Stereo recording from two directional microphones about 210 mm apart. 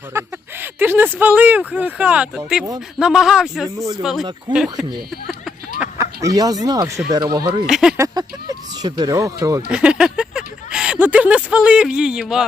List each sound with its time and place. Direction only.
0.1 s speech: 10° right (ahead or behind)
5.8 s speech: 15° right (ahead or behind)
7.7 s speech: 5° right (ahead or behind)
7.9 s speech: 15° right (ahead or behind)
9.6 s speech: 5° right (ahead or behind)